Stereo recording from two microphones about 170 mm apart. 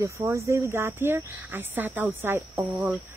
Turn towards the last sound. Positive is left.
turn(degrees=-10)  # may be behind; listen again after turning